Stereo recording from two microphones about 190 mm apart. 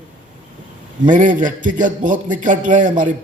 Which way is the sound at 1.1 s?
40° right (ahead or behind).